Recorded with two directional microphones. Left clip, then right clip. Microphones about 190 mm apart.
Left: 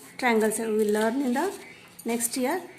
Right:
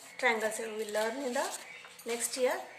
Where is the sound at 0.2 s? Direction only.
50° left (ahead or behind).